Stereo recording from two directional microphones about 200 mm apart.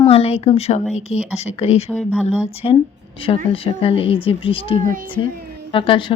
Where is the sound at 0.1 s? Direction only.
30° left (ahead or behind).